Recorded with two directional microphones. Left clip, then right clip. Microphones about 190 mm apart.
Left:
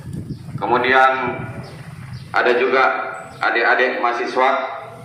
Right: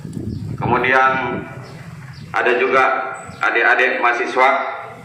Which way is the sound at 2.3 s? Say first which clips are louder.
Even; 5° left (ahead or behind).